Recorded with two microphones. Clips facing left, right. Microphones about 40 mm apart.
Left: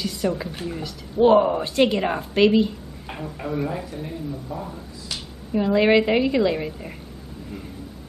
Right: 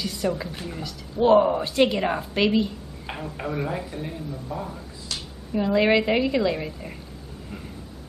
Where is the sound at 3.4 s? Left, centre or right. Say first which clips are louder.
Left 2 dB; centre.